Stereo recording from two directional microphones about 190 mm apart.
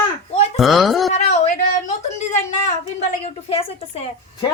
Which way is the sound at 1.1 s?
40° left (ahead or behind).